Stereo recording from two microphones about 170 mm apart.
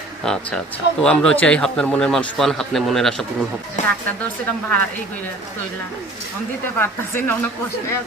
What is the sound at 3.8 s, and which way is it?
Speech, 45° left (ahead or behind).